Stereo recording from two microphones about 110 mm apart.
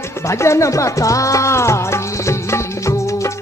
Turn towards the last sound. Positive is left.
turn(degrees=25)  # may be behind; listen again after turning